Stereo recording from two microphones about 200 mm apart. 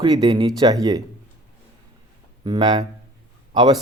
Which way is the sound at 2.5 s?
25° right (ahead or behind).